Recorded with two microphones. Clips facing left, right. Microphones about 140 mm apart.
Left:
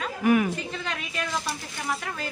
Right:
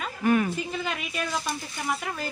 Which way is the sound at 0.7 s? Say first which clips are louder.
Right 2 dB; 5° right (ahead or behind).